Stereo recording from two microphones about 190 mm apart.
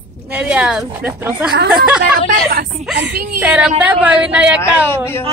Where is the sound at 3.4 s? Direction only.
10° right (ahead or behind).